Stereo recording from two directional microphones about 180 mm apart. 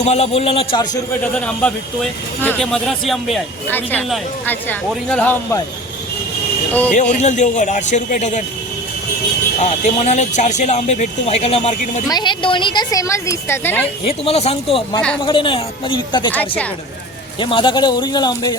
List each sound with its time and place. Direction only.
0.0 s speech: 35° left (ahead or behind)
1.4 s speech: 5° left (ahead or behind)
3.7 s a woman's voice: 10° left (ahead or behind)
6.9 s a man's voice: 40° left (ahead or behind)
9.6 s speech: 40° left (ahead or behind)
12.0 s speech: 25° left (ahead or behind)
14.1 s speech: 35° left (ahead or behind)
16.3 s a woman's voice: 10° left (ahead or behind)
17.4 s speech: 25° left (ahead or behind)